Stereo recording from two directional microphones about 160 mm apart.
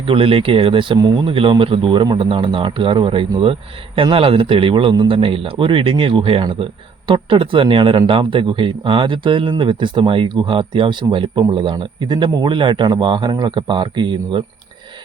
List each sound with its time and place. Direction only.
0.0 s speech: 35° right (ahead or behind)